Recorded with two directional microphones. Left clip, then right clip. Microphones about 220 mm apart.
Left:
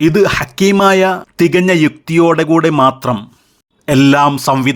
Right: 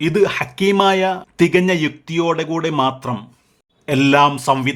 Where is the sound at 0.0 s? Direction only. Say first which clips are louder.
Left 5 dB; 20° left (ahead or behind).